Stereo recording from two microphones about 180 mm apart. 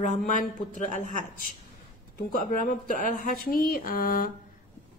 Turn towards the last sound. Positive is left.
turn(degrees=50)  # may be behind; listen again after turning